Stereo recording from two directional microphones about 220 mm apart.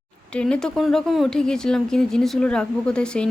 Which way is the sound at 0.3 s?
5° left (ahead or behind).